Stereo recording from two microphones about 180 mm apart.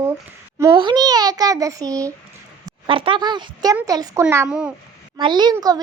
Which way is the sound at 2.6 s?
30° right (ahead or behind).